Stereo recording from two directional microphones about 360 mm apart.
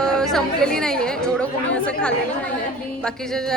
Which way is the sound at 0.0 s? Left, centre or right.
Centre.